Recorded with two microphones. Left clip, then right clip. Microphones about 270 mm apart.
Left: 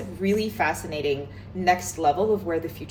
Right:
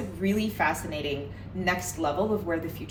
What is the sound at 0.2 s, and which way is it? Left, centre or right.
Speech, centre.